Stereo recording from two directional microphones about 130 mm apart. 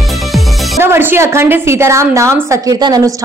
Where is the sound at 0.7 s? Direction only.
15° right (ahead or behind).